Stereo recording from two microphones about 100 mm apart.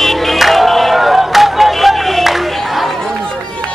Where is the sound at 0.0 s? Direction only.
Centre (ahead or behind).